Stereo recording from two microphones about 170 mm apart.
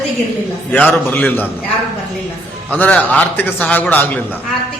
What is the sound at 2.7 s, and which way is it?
A man's voice, 10° left (ahead or behind).